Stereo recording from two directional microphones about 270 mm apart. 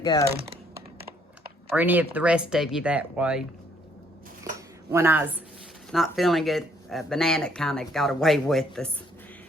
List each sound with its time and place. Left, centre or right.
0.0 s speech: centre
0.3 s speech: right
0.9 s computer keyboard: right
1.7 s speech: centre
4.9 s a woman's voice: centre